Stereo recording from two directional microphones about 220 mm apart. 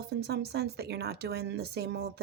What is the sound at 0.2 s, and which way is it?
A woman's voice, 45° right (ahead or behind).